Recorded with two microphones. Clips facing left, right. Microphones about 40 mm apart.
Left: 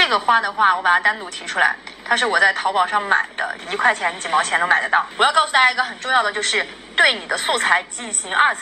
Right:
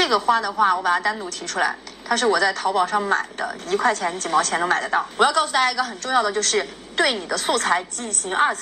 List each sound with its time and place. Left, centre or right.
0.0 s a woman's voice: left